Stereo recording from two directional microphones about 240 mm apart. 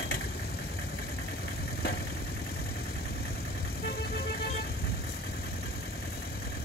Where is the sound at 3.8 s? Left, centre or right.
Left.